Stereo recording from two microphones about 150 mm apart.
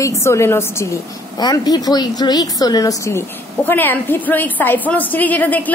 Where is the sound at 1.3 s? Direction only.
25° left (ahead or behind).